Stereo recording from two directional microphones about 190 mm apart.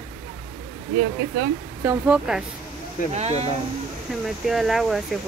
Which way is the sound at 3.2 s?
35° right (ahead or behind).